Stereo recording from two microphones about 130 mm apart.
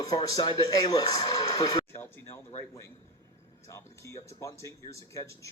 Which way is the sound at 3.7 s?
20° left (ahead or behind).